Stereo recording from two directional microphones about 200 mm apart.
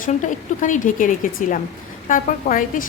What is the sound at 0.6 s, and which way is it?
A woman's voice, 40° left (ahead or behind).